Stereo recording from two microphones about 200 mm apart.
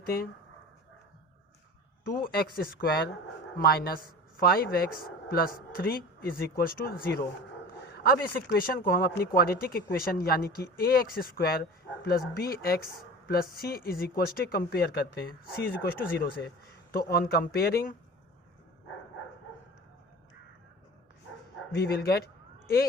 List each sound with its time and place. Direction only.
0.0 s speech: 45° left (ahead or behind)
2.1 s speech: 45° left (ahead or behind)
21.8 s speech: 50° left (ahead or behind)